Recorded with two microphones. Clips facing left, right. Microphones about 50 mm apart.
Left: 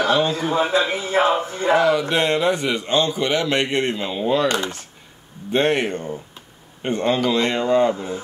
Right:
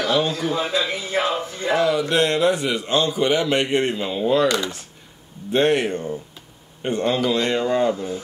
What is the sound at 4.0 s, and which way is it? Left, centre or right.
Speech, centre.